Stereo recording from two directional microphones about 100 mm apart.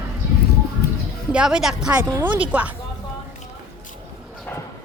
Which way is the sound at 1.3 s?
10° right (ahead or behind).